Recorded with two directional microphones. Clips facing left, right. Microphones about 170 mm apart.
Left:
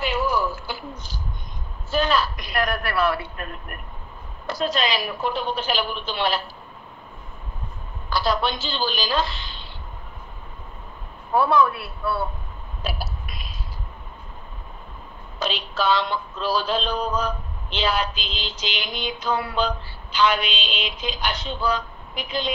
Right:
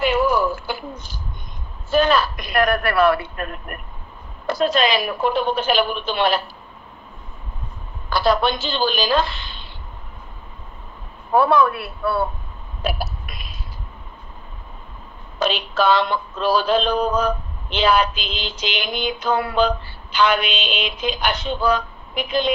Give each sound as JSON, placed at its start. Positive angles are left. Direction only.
{"t": 0.0, "sound": "a sound", "side_deg": -55}
{"t": 1.9, "sound": "speech", "side_deg": -55}
{"t": 4.5, "sound": "speech", "side_deg": -55}
{"t": 8.1, "sound": "speech", "side_deg": -55}
{"t": 11.3, "sound": "speech", "side_deg": -55}
{"t": 12.8, "sound": "a sound", "side_deg": -55}
{"t": 15.3, "sound": "speech", "side_deg": -55}